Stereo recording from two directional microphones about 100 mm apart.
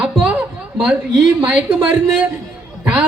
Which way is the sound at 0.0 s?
10° right (ahead or behind).